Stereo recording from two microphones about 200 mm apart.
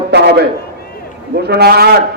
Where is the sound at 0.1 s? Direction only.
55° right (ahead or behind).